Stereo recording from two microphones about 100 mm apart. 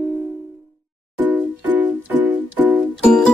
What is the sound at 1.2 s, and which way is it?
Music, 20° right (ahead or behind).